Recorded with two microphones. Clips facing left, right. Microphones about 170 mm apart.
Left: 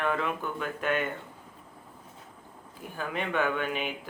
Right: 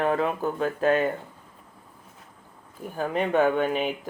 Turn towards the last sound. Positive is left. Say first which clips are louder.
# right 7 dB
turn(degrees=-40)  # may be behind; listen again after turning